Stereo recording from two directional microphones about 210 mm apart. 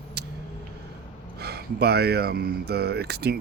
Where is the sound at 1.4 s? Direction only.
50° right (ahead or behind).